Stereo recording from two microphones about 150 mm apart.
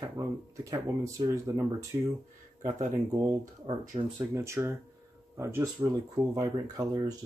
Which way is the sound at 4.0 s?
45° right (ahead or behind).